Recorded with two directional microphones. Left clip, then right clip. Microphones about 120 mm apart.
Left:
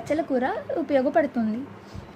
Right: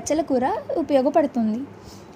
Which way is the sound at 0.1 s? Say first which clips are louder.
Right 3 dB; 15° right (ahead or behind).